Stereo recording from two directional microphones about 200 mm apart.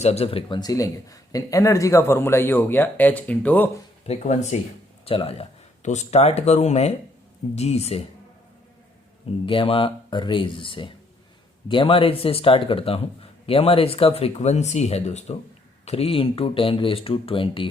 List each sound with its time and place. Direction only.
0.0 s speech: 30° left (ahead or behind); by 3.7 s 10° left (ahead or behind)
4.0 s speech: 30° left (ahead or behind)
9.5 s speech: 25° left (ahead or behind)